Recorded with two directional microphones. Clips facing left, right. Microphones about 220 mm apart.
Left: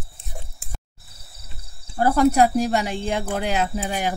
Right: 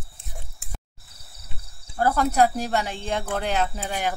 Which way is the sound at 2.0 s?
15° left (ahead or behind).